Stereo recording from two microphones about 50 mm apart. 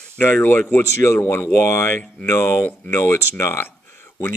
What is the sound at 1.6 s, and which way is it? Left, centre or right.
Speech, left.